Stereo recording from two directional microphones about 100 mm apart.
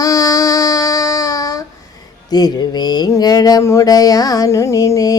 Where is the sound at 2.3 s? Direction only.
45° left (ahead or behind).